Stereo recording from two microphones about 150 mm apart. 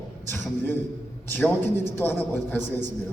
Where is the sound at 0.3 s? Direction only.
15° left (ahead or behind).